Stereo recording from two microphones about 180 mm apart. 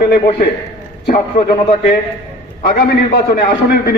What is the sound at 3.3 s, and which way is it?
Speech, 60° left (ahead or behind).